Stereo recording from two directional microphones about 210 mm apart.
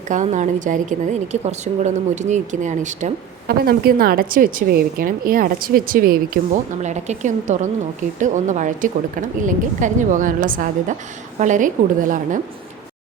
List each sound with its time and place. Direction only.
0.1 s speech: 35° right (ahead or behind)
3.6 s a woman's voice: 45° right (ahead or behind)